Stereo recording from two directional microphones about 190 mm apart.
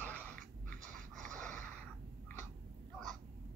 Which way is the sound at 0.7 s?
5° left (ahead or behind).